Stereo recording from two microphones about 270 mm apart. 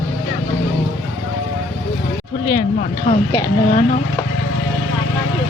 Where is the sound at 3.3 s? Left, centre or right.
Centre.